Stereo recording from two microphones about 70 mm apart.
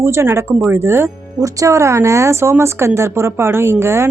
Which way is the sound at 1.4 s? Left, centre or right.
Right.